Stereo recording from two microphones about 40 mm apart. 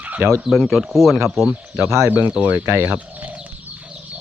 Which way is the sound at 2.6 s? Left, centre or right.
Right.